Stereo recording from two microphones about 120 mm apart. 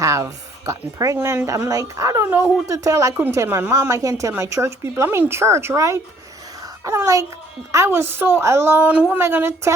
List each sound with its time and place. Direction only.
0.0 s a woman's voice: 25° right (ahead or behind)